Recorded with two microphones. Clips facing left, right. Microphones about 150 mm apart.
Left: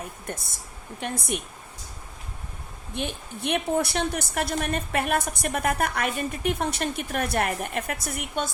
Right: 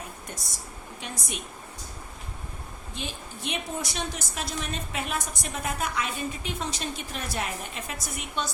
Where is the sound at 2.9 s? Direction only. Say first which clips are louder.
Left 6 dB; 60° left (ahead or behind).